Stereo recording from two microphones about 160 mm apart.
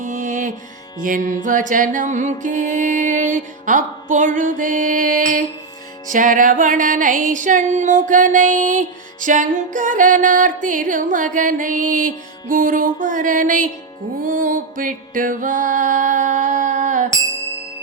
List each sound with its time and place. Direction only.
0.0 s music: 50° right (ahead or behind)